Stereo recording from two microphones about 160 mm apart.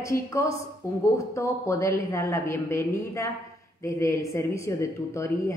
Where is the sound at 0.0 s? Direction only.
20° left (ahead or behind).